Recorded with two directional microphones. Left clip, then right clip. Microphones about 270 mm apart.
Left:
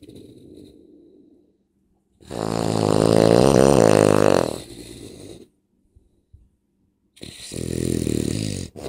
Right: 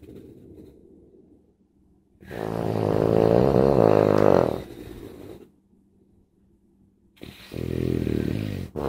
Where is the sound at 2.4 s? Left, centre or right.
Left.